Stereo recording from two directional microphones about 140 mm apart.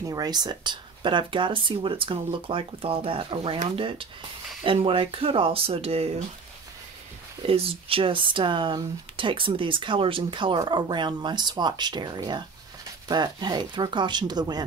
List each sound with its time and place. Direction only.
0.0 s speech: 25° right (ahead or behind); by 6.2 s 45° right (ahead or behind)
7.4 s speech: 45° right (ahead or behind)